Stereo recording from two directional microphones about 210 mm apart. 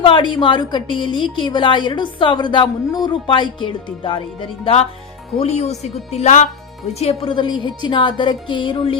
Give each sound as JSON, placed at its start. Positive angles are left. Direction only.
{"t": 0.0, "sound": "a woman's voice", "side_deg": 25}